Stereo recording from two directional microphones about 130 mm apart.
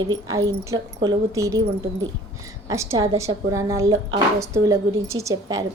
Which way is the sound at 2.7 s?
20° right (ahead or behind).